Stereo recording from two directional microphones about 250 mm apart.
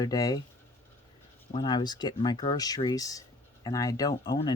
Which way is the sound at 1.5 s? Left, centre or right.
Centre.